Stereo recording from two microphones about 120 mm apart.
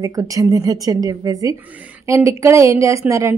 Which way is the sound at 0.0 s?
30° right (ahead or behind).